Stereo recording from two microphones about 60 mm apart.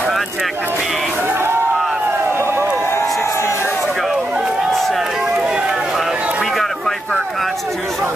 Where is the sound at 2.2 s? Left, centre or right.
Right.